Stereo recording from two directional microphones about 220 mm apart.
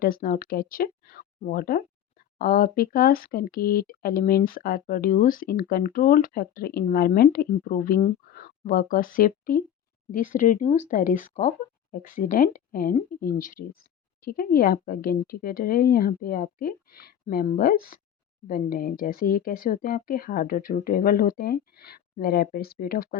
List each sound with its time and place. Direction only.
0.0 s speech: 40° left (ahead or behind)